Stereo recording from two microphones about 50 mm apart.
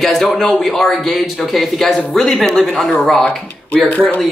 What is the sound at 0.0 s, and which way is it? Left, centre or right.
Speech, centre.